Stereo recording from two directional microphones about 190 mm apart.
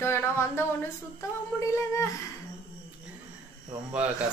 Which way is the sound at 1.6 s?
15° left (ahead or behind).